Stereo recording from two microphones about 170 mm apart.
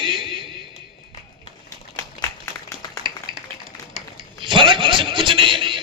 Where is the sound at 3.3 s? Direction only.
30° right (ahead or behind).